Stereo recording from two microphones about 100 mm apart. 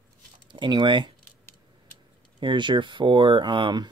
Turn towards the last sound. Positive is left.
turn(degrees=-50)  # may be behind; listen again after turning